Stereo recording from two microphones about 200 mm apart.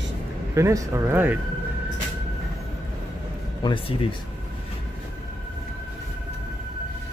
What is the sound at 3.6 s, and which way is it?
Speech, 25° left (ahead or behind).